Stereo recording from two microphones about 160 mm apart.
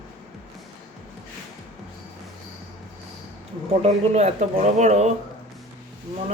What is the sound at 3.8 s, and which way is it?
Speech, 45° right (ahead or behind).